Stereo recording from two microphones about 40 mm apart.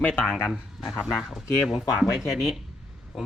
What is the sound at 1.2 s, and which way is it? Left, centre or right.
Speech, centre.